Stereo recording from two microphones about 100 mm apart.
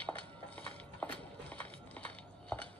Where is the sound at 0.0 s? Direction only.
15° left (ahead or behind).